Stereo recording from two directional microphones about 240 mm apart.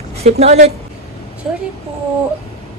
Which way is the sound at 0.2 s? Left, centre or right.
Right.